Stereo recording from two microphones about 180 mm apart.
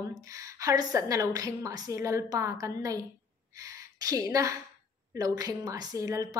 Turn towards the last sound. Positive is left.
turn(degrees=-20)  # may be behind; listen again after turning